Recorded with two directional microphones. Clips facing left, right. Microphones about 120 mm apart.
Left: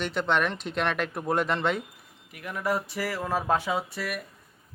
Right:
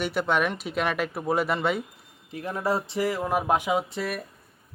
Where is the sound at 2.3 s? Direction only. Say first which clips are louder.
Right 2 dB; 30° right (ahead or behind).